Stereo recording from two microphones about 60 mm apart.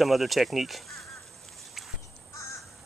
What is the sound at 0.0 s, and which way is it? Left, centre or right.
Speech, centre.